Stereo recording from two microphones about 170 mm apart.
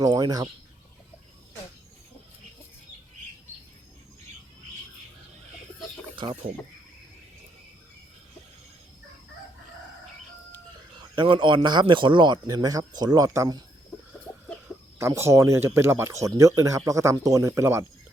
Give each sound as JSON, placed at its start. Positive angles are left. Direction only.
{"t": 0.0, "sound": "speech", "side_deg": -20}
{"t": 11.1, "sound": "speech", "side_deg": -30}
{"t": 14.9, "sound": "speech", "side_deg": -15}